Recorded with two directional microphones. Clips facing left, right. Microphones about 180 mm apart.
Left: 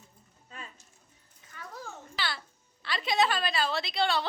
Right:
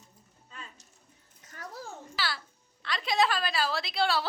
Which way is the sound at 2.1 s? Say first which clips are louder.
Right 1 dB; 5° right (ahead or behind).